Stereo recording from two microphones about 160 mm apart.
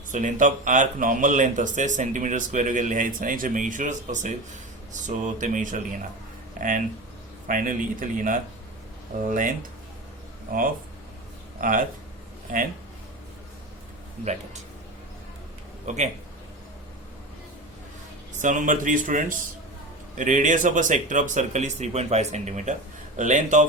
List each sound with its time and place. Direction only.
0.1 s speech: 55° right (ahead or behind)
10.5 s speech: 65° right (ahead or behind)
11.6 s speech: 55° right (ahead or behind)
15.9 s speech: 45° right (ahead or behind)
18.4 s speech: 55° right (ahead or behind)